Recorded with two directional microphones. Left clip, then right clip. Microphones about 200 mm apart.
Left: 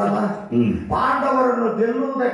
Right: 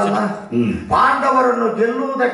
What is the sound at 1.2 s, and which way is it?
Speech, 25° left (ahead or behind).